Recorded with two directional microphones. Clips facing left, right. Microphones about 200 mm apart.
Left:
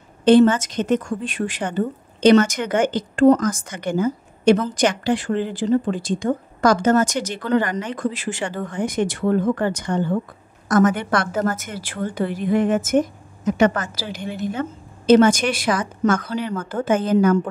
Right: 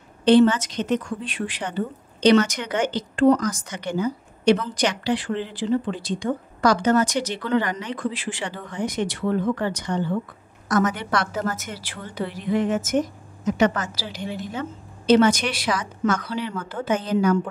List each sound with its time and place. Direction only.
0.2 s a woman's voice: 50° left (ahead or behind)